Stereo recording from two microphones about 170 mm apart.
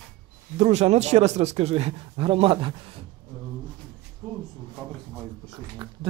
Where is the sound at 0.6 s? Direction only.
40° right (ahead or behind).